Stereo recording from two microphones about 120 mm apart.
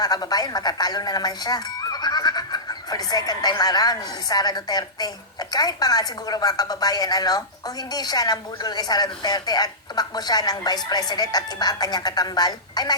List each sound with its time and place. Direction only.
0.0 s speech: 35° left (ahead or behind)